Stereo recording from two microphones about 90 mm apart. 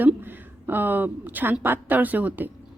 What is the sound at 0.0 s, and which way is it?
A woman's voice, 20° right (ahead or behind).